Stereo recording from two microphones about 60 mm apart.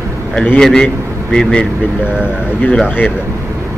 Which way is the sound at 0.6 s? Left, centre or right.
Centre.